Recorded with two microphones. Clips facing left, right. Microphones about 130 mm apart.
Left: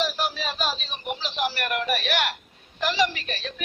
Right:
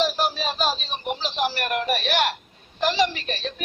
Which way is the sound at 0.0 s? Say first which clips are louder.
Right 4 dB; 30° right (ahead or behind).